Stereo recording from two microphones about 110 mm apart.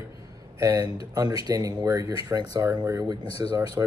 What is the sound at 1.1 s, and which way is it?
Speech, 35° right (ahead or behind).